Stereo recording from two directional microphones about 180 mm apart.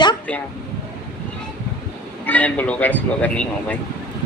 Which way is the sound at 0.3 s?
10° left (ahead or behind).